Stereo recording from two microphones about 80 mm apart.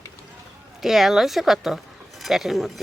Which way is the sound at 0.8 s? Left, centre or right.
Centre.